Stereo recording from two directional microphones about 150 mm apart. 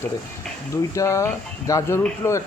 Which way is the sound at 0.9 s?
20° left (ahead or behind).